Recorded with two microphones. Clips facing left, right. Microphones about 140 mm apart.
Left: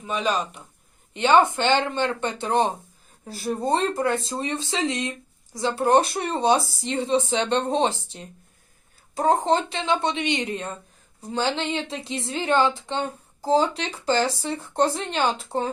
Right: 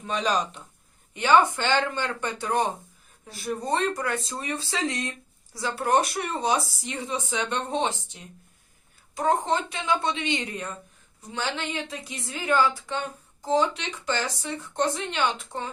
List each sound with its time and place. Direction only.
0.0 s speech: 5° left (ahead or behind)
1.1 s speech: 25° left (ahead or behind)
3.2 s speech: 35° left (ahead or behind)